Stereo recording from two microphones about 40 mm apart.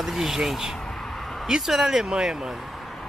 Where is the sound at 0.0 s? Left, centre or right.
Centre.